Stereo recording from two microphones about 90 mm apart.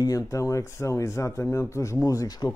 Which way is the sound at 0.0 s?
40° left (ahead or behind).